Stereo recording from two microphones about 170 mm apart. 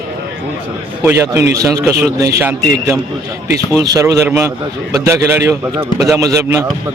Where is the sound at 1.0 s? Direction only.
15° right (ahead or behind).